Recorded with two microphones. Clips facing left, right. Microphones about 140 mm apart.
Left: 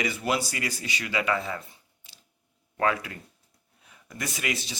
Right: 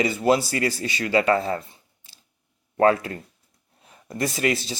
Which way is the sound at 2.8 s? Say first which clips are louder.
Right 8 dB; 35° right (ahead or behind).